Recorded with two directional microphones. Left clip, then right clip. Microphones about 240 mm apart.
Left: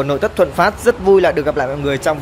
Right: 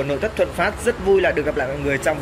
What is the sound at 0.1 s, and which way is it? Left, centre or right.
Speech, left.